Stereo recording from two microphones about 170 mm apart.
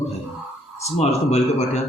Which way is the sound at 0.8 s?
40° left (ahead or behind).